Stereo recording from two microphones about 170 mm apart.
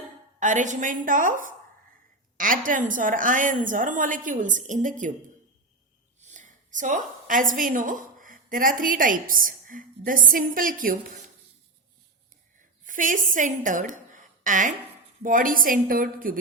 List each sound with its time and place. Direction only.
0.3 s a woman's voice: 45° right (ahead or behind)
6.1 s a woman's voice: 45° right (ahead or behind)
12.8 s a woman's voice: 50° right (ahead or behind)